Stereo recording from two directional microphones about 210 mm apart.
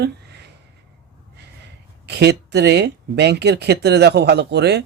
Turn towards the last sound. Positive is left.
turn(degrees=-50)  # may be behind; listen again after turning